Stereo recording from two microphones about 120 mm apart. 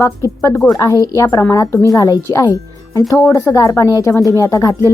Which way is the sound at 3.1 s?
20° left (ahead or behind).